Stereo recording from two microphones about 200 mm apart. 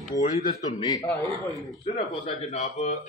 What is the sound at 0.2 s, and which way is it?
Speech, 40° left (ahead or behind).